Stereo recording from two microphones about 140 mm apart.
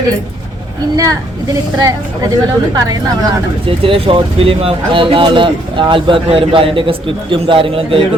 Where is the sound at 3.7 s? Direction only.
40° right (ahead or behind).